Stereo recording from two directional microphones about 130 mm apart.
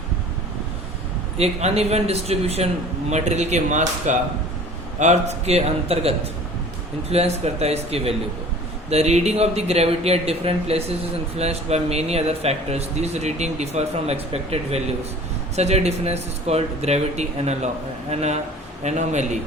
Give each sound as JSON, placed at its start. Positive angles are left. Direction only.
{"t": 1.4, "sound": "a man's voice", "side_deg": -55}